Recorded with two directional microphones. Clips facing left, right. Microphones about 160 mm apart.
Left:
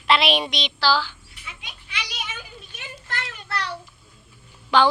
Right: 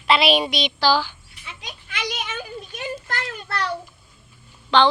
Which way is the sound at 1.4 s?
35° right (ahead or behind).